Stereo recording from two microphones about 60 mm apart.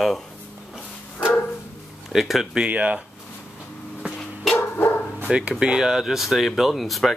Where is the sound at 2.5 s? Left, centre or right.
Right.